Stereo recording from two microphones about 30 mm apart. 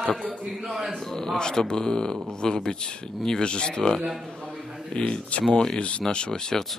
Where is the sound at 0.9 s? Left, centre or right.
Centre.